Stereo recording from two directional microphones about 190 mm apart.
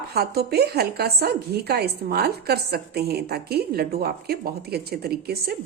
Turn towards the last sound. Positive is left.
turn(degrees=-55)  # may be behind; listen again after turning